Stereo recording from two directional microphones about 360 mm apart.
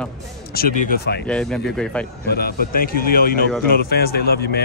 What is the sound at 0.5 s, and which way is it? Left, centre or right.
Speech, left.